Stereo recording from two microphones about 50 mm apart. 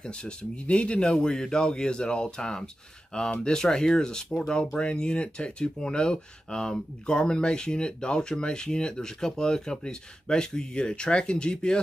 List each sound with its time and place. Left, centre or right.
0.0 s speech: centre